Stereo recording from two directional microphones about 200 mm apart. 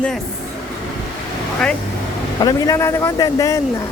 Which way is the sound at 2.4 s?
20° left (ahead or behind).